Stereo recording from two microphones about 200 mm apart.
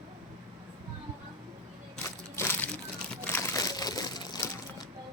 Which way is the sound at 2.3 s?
10° left (ahead or behind).